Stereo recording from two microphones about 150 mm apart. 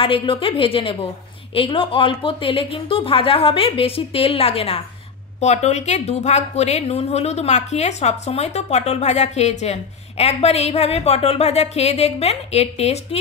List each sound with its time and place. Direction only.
0.0 s a woman's voice: 35° left (ahead or behind)